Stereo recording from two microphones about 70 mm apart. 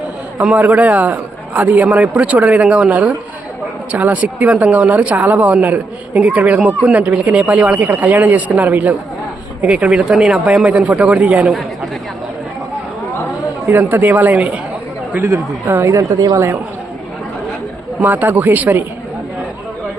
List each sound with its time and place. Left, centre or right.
0.6 s speech: right
13.7 s speech: right
15.6 s speech: right
15.9 s a woman's voice: right
18.0 s speech: right